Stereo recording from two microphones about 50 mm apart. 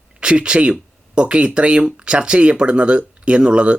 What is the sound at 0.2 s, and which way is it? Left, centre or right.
Speech, centre.